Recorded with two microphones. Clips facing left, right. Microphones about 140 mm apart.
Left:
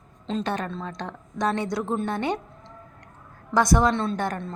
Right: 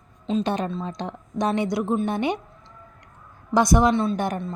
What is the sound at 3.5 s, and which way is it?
Speech, 15° right (ahead or behind).